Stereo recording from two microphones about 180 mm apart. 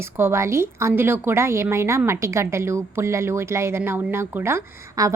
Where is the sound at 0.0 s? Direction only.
15° right (ahead or behind).